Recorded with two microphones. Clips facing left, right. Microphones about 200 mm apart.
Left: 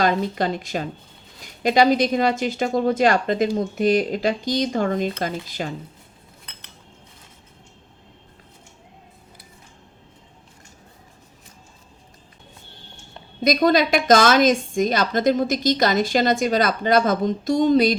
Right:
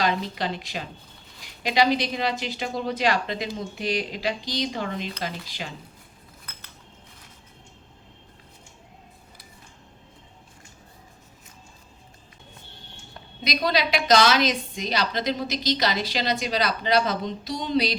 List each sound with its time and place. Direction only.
0.0 s a woman's voice: 45° left (ahead or behind)
13.4 s a woman's voice: 50° left (ahead or behind)